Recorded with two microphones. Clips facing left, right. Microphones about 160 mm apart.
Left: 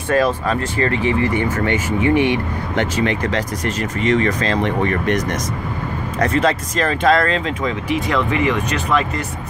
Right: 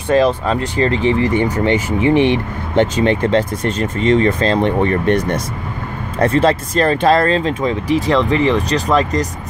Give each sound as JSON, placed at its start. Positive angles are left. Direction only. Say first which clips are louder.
{"t": 0.1, "sound": "speech", "louder": "right 3 dB", "side_deg": -25}